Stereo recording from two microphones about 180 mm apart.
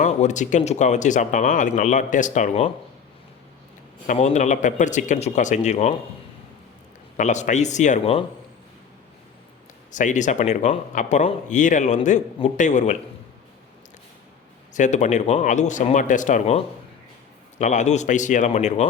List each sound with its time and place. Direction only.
0.0 s speech: 40° left (ahead or behind)
4.0 s speech: 45° left (ahead or behind)
7.2 s speech: 40° left (ahead or behind)
9.9 s speech: 45° left (ahead or behind)
14.7 s speech: 40° left (ahead or behind)